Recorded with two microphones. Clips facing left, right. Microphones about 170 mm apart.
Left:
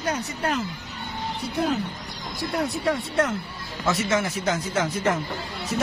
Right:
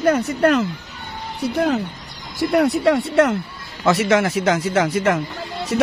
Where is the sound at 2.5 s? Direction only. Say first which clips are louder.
Right 9 dB; 85° right.